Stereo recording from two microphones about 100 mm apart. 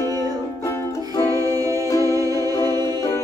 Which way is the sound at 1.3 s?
35° right (ahead or behind).